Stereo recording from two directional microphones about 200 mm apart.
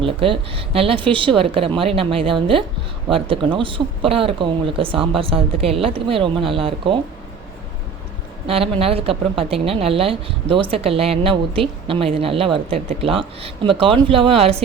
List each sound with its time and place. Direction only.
0.0 s a woman's voice: 25° right (ahead or behind)
8.4 s a woman's voice: 30° right (ahead or behind)